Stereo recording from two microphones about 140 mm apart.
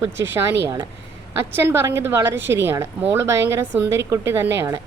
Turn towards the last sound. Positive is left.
turn(degrees=-20)  # may be behind; listen again after turning